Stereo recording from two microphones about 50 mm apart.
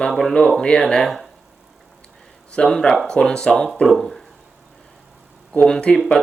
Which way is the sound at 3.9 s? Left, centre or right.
Centre.